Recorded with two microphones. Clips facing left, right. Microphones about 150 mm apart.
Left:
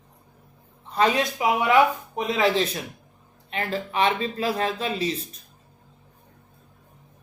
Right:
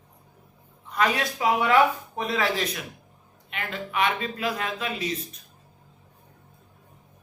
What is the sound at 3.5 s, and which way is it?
A man's voice, 35° left (ahead or behind).